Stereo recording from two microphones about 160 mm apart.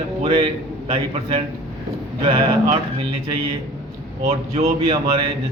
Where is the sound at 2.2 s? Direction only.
35° right (ahead or behind).